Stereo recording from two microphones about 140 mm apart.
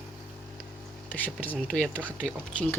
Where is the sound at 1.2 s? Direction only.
10° left (ahead or behind).